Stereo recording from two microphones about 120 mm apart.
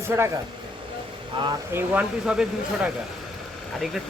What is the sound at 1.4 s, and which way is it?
Speech, 40° right (ahead or behind).